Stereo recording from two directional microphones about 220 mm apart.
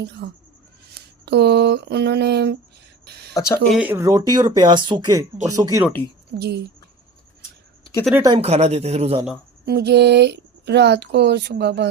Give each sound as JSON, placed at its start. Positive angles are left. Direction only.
{"t": 0.2, "sound": "speech", "side_deg": -40}
{"t": 3.3, "sound": "speech", "side_deg": 15}
{"t": 3.7, "sound": "speech", "side_deg": -5}
{"t": 6.4, "sound": "speech", "side_deg": -50}
{"t": 8.4, "sound": "speech", "side_deg": -30}
{"t": 9.6, "sound": "speech", "side_deg": -45}